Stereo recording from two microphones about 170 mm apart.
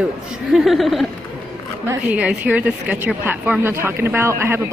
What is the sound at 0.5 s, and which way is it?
A woman's voice, centre (ahead or behind).